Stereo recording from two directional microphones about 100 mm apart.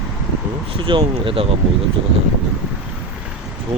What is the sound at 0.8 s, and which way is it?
Speech, 55° right (ahead or behind).